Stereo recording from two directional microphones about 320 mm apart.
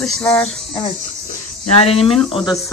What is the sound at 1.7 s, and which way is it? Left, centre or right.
Speech, centre.